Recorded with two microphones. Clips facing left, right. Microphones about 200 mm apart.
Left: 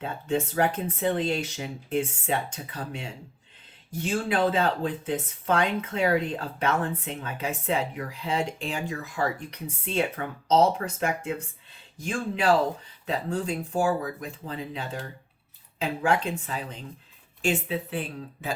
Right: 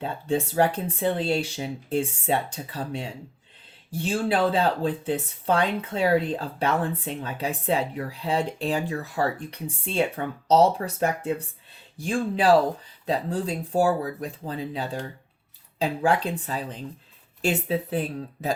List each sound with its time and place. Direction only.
0.0 s speech: 35° right (ahead or behind)